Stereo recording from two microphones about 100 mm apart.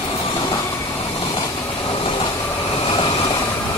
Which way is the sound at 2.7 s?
55° left (ahead or behind).